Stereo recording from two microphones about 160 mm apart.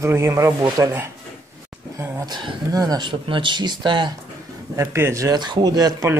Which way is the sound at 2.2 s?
25° right (ahead or behind).